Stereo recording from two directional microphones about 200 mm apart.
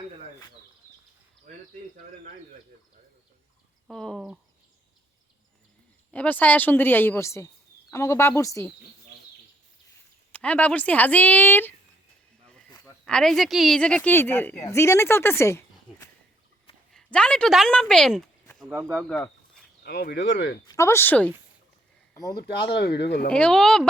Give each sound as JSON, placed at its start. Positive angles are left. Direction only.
{"t": 3.8, "sound": "speech", "side_deg": 0}
{"t": 6.1, "sound": "speech", "side_deg": 5}
{"t": 10.3, "sound": "speech", "side_deg": 5}
{"t": 12.5, "sound": "snake", "side_deg": 5}
{"t": 12.7, "sound": "a woman's voice", "side_deg": 5}
{"t": 18.7, "sound": "speech", "side_deg": -10}
{"t": 19.0, "sound": "speech", "side_deg": 5}
{"t": 19.8, "sound": "speech", "side_deg": 55}
{"t": 20.7, "sound": "speech", "side_deg": 15}
{"t": 22.4, "sound": "speech", "side_deg": 55}
{"t": 23.3, "sound": "speech", "side_deg": 5}